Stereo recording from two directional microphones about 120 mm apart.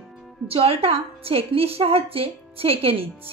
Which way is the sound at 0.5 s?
55° right (ahead or behind).